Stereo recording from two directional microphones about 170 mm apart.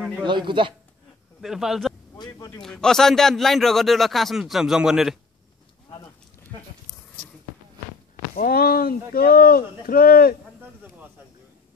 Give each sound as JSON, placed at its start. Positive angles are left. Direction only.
{"t": 0.3, "sound": "speech", "side_deg": -30}
{"t": 1.4, "sound": "a man's voice", "side_deg": 0}
{"t": 2.1, "sound": "speech", "side_deg": 20}
{"t": 2.6, "sound": "a man's voice", "side_deg": 5}
{"t": 8.4, "sound": "speech", "side_deg": 60}
{"t": 10.6, "sound": "a sound", "side_deg": -10}